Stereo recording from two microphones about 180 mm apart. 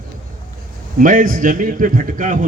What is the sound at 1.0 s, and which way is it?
A man's voice, 50° right (ahead or behind).